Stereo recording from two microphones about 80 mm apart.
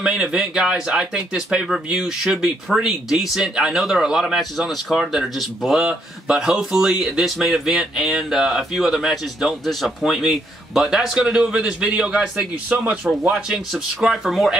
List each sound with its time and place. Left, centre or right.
0.0 s speech: centre
12.6 s speech: centre
13.3 s speech: centre